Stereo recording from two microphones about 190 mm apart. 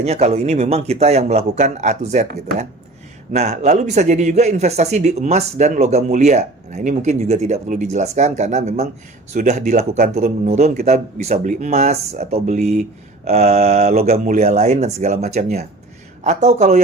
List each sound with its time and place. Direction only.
0.0 s a man's voice: 35° right (ahead or behind)